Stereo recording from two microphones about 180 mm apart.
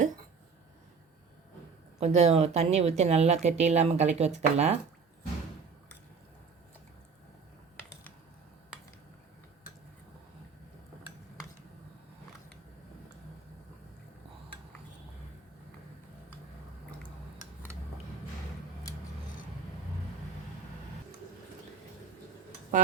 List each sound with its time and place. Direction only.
2.0 s speech: 35° right (ahead or behind)